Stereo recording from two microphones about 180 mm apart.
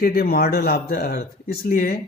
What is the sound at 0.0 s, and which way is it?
Speech, 55° left (ahead or behind).